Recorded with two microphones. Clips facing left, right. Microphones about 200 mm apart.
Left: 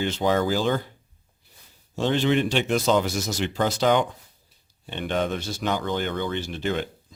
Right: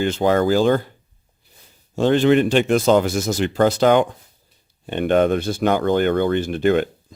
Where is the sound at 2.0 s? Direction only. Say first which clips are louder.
Right 7 dB; 50° right (ahead or behind).